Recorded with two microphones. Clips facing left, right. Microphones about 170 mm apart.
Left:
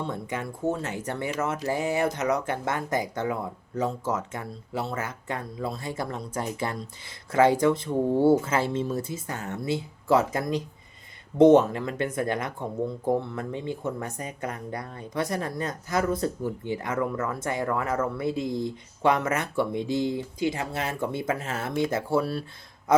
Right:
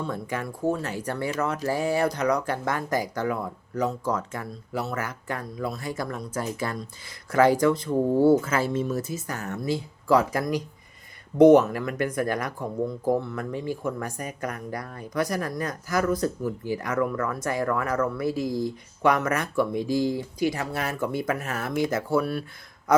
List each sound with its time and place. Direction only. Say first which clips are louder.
0.0 s speech: right 1 dB; 25° left (ahead or behind)